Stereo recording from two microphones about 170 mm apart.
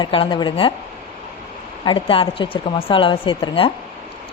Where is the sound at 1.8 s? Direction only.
30° left (ahead or behind).